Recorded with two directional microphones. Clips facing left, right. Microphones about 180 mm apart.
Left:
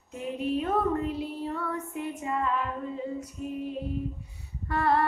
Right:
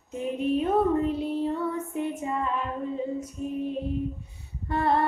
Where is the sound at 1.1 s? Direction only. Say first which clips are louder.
Right 5 dB; 20° right (ahead or behind).